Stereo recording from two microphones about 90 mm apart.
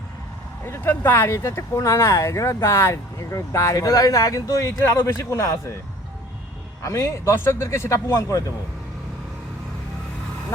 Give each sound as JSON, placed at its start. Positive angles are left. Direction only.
{"t": 0.6, "sound": "speech", "side_deg": 25}
{"t": 6.8, "sound": "speech", "side_deg": 35}